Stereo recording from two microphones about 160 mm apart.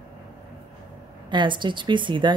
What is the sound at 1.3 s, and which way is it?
Speech, 30° right (ahead or behind).